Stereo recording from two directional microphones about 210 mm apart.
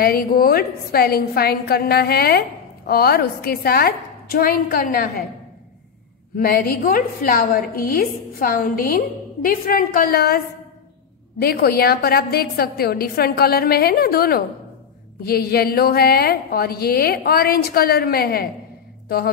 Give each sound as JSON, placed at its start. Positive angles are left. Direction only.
{"t": 0.0, "sound": "a woman's voice", "side_deg": 45}
{"t": 6.3, "sound": "a woman's voice", "side_deg": 45}